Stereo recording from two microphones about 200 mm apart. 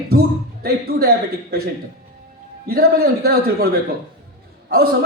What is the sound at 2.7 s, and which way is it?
Speech, 50° right (ahead or behind).